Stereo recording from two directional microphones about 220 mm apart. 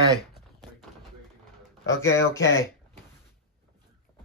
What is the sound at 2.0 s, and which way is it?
Speech, 15° left (ahead or behind).